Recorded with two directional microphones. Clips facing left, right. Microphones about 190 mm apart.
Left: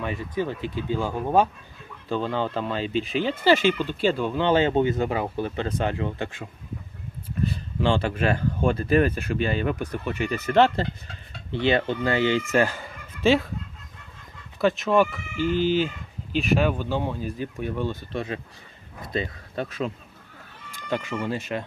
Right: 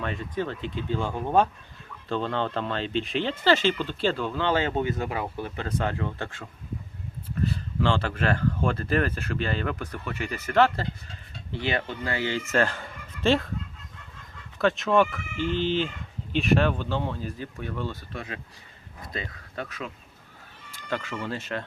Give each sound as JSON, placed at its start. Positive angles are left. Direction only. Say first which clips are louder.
{"t": 0.0, "sound": "speech", "louder": "left 2 dB", "side_deg": 10}
{"t": 14.6, "sound": "speech", "louder": "left 1 dB", "side_deg": 5}
{"t": 20.9, "sound": "speech", "louder": "left 4 dB", "side_deg": 15}